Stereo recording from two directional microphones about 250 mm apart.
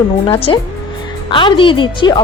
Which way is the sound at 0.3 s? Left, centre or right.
Left.